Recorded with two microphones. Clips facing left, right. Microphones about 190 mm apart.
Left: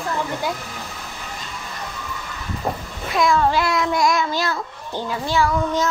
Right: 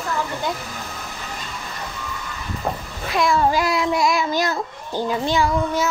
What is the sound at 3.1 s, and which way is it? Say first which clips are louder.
A child's voice: even; centre (ahead or behind).